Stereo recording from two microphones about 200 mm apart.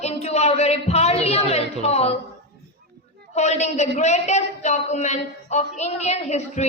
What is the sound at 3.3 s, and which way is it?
A woman's voice, 35° left (ahead or behind).